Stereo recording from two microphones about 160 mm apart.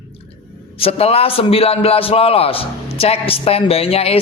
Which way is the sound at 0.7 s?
35° left (ahead or behind).